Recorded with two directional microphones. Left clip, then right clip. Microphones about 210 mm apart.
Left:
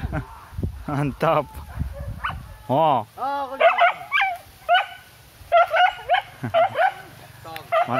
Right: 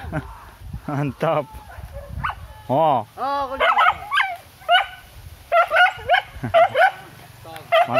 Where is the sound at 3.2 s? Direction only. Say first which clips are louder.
Even; 45° right (ahead or behind).